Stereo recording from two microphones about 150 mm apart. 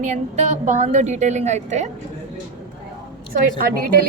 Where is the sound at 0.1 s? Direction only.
50° right (ahead or behind).